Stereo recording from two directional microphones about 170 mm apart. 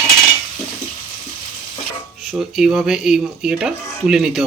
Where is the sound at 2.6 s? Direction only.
5° right (ahead or behind).